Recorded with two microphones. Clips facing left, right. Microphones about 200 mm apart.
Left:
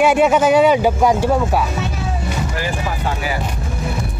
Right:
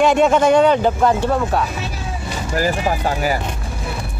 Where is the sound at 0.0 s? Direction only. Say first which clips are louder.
Even; 5° left (ahead or behind).